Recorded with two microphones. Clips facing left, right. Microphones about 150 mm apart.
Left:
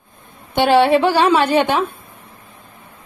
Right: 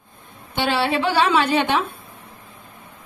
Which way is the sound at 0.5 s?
50° left (ahead or behind).